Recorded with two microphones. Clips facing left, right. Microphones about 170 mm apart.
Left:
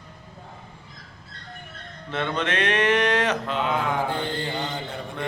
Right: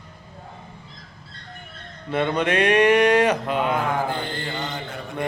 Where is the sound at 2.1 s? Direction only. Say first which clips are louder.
Right 5 dB; 10° right (ahead or behind).